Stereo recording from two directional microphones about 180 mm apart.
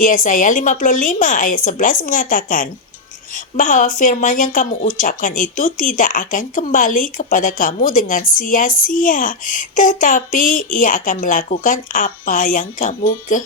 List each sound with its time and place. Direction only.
0.0 s speech: 45° left (ahead or behind)